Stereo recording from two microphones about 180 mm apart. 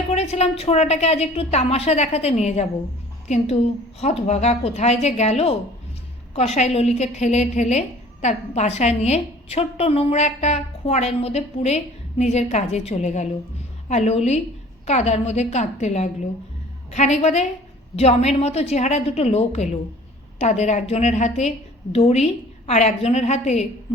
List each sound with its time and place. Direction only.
0.1 s a woman's voice: 35° left (ahead or behind)